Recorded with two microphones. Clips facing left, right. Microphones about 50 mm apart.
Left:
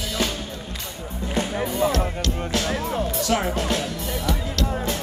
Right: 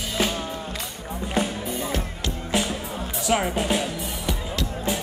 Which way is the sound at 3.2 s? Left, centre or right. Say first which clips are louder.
Right 4 dB; centre.